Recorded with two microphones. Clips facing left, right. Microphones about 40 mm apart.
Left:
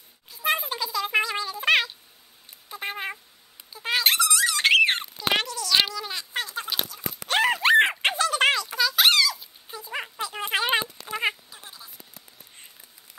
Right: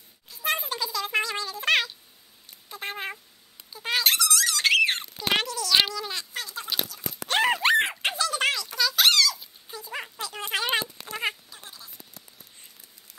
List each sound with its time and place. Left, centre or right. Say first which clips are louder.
0.3 s meow: left 2 dB; centre
2.7 s cat: left 2 dB; centre
3.7 s dog: left 1 dB; centre
4.0 s squeak: left 3 dB; left
5.3 s a sound: even; centre
6.3 s a sound: left 5 dB; left
6.9 s a sound: left 2 dB; centre
7.2 s horse: left 1 dB; centre
7.9 s a sound: left 3 dB; left
8.6 s music: left 1 dB; centre
9.4 s dog: left 1 dB; centre
11.1 s cat: left 3 dB; centre